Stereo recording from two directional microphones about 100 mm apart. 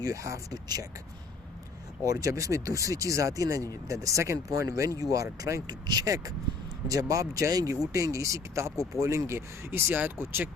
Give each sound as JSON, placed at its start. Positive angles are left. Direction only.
{"t": 0.0, "sound": "speech", "side_deg": -30}
{"t": 2.0, "sound": "speech", "side_deg": -35}